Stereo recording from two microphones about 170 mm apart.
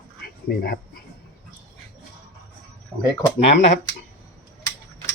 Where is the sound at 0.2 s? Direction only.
65° left (ahead or behind).